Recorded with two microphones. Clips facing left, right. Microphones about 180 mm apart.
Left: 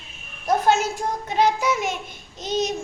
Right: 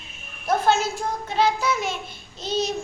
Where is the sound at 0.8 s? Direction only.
15° left (ahead or behind).